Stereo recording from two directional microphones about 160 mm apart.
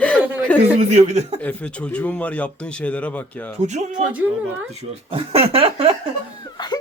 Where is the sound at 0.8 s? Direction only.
45° right (ahead or behind).